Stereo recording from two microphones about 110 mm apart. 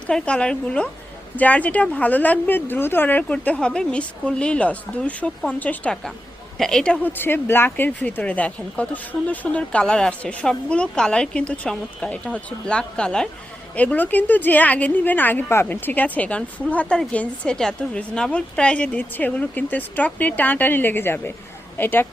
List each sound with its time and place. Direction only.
0.1 s a woman's voice: 10° left (ahead or behind)